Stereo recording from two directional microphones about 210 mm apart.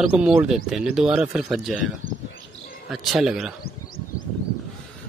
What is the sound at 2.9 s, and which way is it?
Speech, centre (ahead or behind).